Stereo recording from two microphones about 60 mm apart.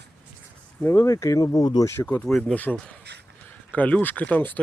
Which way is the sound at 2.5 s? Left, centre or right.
Left.